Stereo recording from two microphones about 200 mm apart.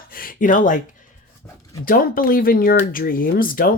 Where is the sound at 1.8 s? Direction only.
45° left (ahead or behind).